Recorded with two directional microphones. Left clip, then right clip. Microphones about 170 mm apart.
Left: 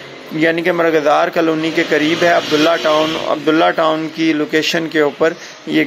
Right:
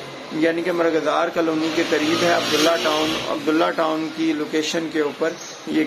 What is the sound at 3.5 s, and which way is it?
Speech, 30° left (ahead or behind).